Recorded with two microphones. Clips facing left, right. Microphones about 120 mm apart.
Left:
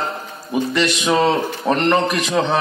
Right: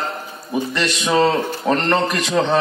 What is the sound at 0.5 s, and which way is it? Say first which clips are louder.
A man's voice: left 3 dB; 10° left (ahead or behind).